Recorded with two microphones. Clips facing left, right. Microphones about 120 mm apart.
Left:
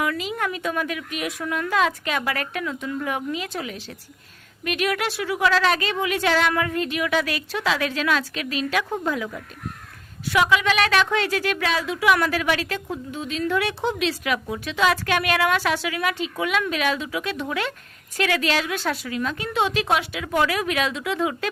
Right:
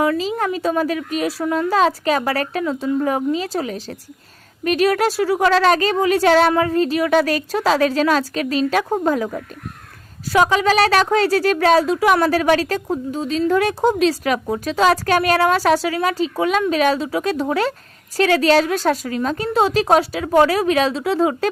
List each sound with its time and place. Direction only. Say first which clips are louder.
0.0 s a woman's voice: right 7 dB; 30° right (ahead or behind)